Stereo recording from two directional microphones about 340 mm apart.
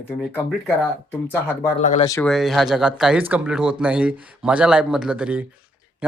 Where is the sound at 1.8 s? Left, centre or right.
Left.